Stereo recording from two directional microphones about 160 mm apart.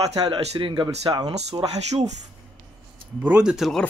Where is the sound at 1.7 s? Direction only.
45° right (ahead or behind).